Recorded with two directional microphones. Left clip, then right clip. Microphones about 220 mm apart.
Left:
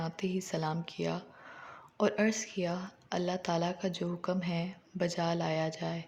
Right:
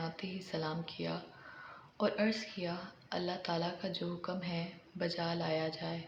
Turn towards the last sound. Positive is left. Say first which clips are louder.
# left 3 dB
turn(degrees=50)  # may be behind; listen again after turning